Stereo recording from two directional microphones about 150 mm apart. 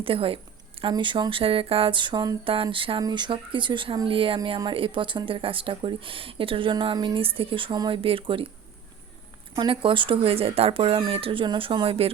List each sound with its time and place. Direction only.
0.0 s speech: 35° right (ahead or behind)
9.6 s speech: 35° right (ahead or behind)